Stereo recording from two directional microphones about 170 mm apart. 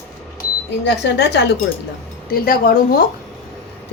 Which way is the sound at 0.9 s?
90° left.